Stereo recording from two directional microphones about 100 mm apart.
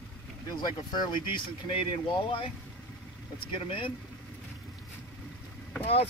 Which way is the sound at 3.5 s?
60° left (ahead or behind).